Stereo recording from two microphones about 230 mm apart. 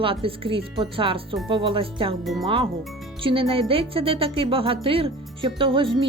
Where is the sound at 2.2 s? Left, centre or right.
Centre.